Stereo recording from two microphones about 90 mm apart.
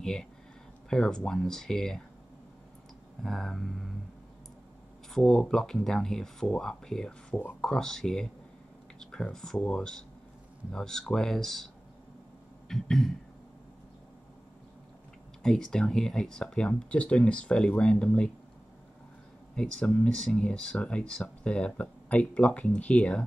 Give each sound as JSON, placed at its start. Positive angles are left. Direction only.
{"t": 0.0, "sound": "speech", "side_deg": 5}
{"t": 3.2, "sound": "speech", "side_deg": 5}
{"t": 5.1, "sound": "speech", "side_deg": 10}
{"t": 15.4, "sound": "speech", "side_deg": 5}
{"t": 19.5, "sound": "speech", "side_deg": 10}